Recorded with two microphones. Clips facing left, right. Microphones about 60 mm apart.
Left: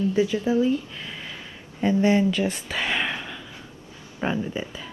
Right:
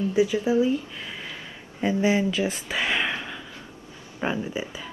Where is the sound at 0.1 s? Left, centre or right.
Centre.